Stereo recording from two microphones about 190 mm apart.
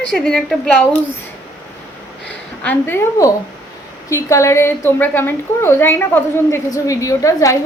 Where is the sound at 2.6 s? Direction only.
10° left (ahead or behind).